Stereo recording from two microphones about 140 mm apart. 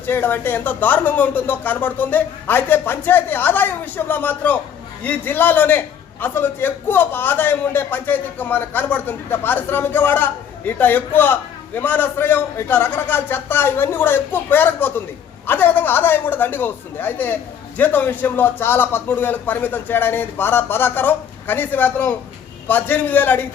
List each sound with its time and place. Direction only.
0.0 s a man's voice: 15° left (ahead or behind)